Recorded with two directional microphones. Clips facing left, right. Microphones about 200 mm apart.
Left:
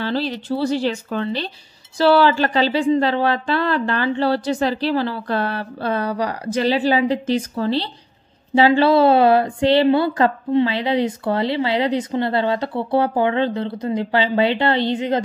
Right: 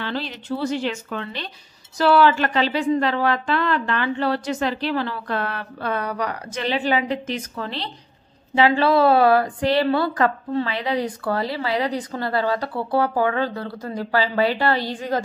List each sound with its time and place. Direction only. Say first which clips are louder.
0.0 s a woman's voice: left 6 dB; 35° left (ahead or behind)